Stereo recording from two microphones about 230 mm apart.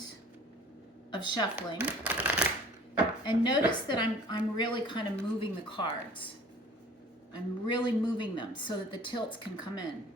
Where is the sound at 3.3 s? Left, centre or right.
Centre.